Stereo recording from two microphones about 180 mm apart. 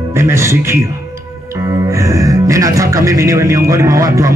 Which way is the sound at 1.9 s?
15° right (ahead or behind).